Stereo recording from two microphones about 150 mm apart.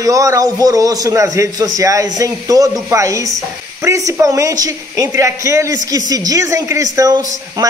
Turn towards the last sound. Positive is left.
turn(degrees=-25)  # may be behind; listen again after turning